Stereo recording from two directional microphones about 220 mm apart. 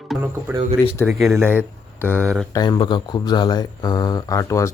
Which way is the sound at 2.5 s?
20° left (ahead or behind).